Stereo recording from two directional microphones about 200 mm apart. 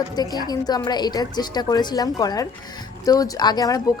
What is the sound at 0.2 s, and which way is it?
A woman's voice, 20° left (ahead or behind).